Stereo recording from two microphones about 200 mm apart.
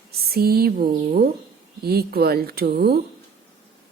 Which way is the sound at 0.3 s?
50° right (ahead or behind).